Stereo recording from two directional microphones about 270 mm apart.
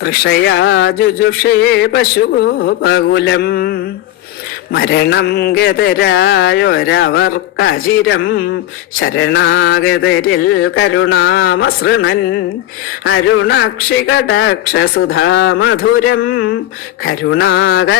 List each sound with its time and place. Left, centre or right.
0.0 s speech: left
9.0 s mantra: left
11.0 s speech: left
13.1 s mantra: left
14.1 s speech: left
17.1 s mantra: left